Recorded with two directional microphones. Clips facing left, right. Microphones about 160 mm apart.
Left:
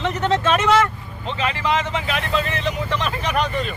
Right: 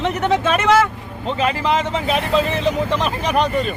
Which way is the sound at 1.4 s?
40° right (ahead or behind).